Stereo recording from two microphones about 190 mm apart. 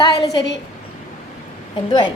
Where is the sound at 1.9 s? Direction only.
25° left (ahead or behind).